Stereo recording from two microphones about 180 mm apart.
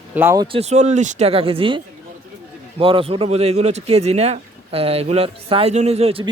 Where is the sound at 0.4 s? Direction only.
35° right (ahead or behind).